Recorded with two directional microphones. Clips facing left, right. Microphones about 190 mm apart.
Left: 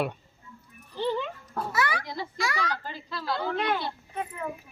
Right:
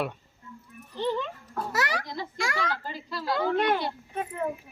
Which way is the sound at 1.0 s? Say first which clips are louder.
Even; 10° left (ahead or behind).